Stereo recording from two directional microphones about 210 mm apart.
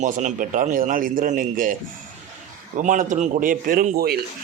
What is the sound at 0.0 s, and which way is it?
A man's voice, 35° right (ahead or behind).